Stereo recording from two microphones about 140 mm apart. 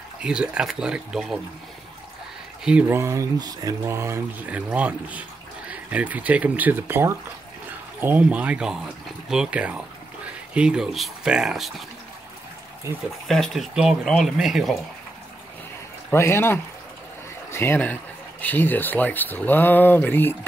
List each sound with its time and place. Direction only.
0.2 s speech: 5° right (ahead or behind)
2.6 s speech: 5° right (ahead or behind)
3.0 s speech: 20° right (ahead or behind); by 11.8 s centre (ahead or behind)
12.9 s speech: 20° right (ahead or behind)
13.3 s speech: centre (ahead or behind)
16.1 s speech: 15° left (ahead or behind)